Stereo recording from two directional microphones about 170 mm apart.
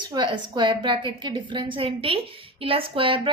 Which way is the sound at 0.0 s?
25° right (ahead or behind).